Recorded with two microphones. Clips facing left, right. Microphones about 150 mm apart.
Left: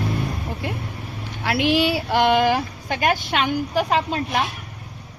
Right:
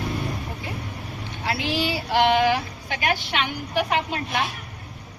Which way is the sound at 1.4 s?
65° left (ahead or behind).